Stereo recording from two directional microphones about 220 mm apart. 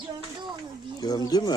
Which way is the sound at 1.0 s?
15° left (ahead or behind).